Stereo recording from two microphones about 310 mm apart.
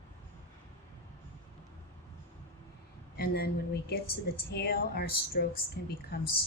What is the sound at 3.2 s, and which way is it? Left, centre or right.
Speech, left.